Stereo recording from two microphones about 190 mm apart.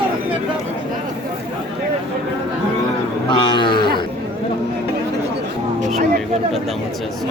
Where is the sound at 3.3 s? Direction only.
25° left (ahead or behind).